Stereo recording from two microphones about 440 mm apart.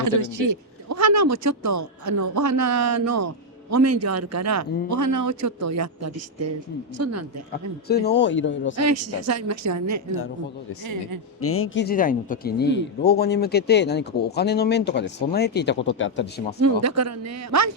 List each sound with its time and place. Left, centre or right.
0.2 s speech: right
7.9 s speech: left
8.7 s speech: right
11.3 s speech: left
16.6 s speech: right